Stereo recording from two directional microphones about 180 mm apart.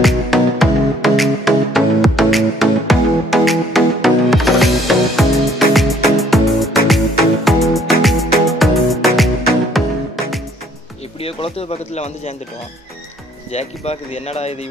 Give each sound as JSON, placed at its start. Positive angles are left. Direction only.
{"t": 0.0, "sound": "music", "side_deg": 0}
{"t": 11.1, "sound": "speech", "side_deg": 30}
{"t": 13.5, "sound": "speech", "side_deg": 35}